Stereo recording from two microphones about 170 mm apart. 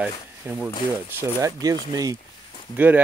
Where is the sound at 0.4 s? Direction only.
10° right (ahead or behind).